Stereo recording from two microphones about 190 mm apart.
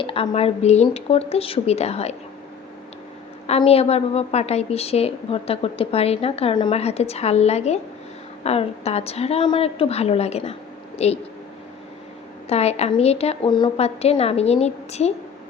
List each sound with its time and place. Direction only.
0.0 s a woman's voice: 30° left (ahead or behind)
3.4 s a woman's voice: 35° left (ahead or behind)
12.5 s a woman's voice: 35° left (ahead or behind)